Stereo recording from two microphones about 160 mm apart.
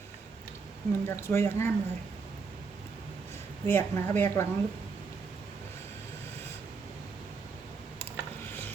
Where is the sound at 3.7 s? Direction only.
15° left (ahead or behind).